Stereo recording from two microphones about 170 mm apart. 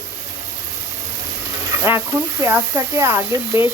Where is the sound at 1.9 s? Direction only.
15° right (ahead or behind).